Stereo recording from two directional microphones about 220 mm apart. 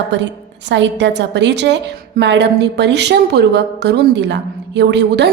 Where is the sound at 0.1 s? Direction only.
50° right (ahead or behind).